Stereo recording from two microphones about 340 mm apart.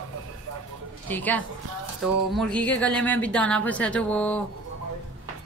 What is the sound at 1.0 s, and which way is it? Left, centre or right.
A woman's voice, centre.